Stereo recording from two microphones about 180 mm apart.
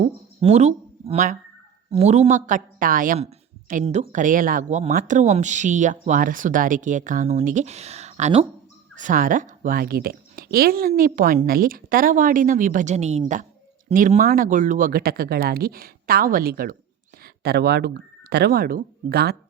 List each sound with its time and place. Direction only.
0.4 s speech: 35° right (ahead or behind)
9.0 s speech: 50° right (ahead or behind)